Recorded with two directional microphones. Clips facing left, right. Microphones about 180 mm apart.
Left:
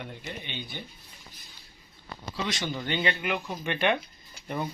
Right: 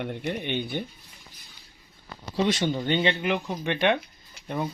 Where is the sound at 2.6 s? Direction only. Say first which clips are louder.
Right 5 dB; 25° right (ahead or behind).